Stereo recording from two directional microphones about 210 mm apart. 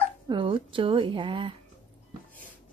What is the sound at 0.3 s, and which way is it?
Speech, 25° right (ahead or behind).